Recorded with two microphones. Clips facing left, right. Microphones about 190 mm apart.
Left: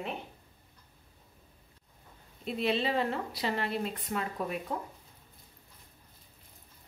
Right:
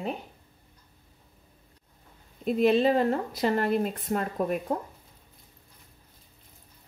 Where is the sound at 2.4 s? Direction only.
45° right (ahead or behind).